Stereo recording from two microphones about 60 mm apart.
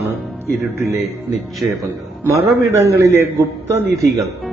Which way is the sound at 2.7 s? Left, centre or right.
Right.